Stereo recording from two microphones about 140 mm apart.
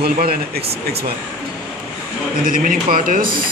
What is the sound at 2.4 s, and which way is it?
Speech, 85° right.